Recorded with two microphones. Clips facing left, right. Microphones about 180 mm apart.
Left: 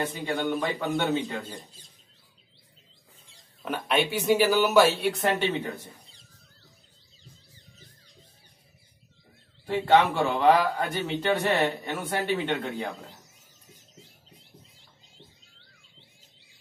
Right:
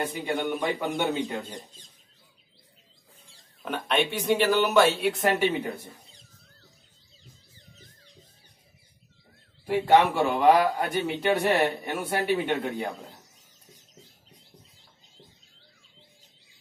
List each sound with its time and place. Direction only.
0.0 s speech: 10° right (ahead or behind)
3.6 s speech: centre (ahead or behind)
9.7 s speech: 10° right (ahead or behind)